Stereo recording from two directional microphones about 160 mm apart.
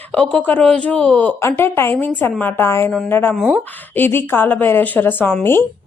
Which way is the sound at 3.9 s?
15° left (ahead or behind).